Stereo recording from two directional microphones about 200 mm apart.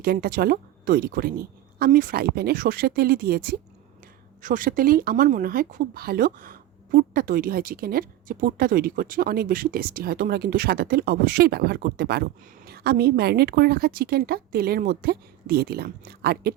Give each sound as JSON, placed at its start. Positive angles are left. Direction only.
{"t": 0.0, "sound": "speech", "side_deg": -50}